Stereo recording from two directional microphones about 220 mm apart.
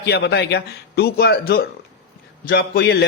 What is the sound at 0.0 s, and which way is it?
Speech, 45° left (ahead or behind).